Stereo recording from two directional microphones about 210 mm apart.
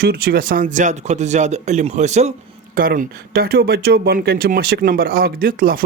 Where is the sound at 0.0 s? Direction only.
45° right (ahead or behind).